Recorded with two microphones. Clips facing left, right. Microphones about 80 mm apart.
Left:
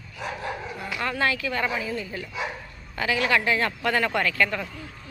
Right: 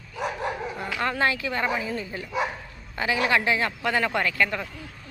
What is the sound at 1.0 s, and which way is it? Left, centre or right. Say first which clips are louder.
Speech: right 1 dB; right.